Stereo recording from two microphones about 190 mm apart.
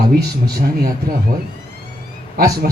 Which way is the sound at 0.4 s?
55° right (ahead or behind).